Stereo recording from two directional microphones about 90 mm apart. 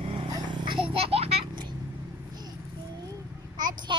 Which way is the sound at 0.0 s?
80° right.